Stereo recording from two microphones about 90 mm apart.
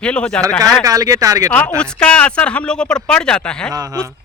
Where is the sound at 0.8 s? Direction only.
40° right (ahead or behind).